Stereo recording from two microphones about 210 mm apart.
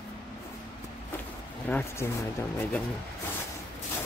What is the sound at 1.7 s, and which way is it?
Speech, 5° left (ahead or behind).